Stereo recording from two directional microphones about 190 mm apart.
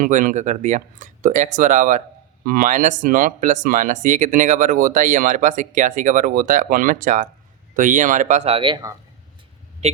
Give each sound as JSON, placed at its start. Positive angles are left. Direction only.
{"t": 0.0, "sound": "speech", "side_deg": -45}
{"t": 9.8, "sound": "speech", "side_deg": -35}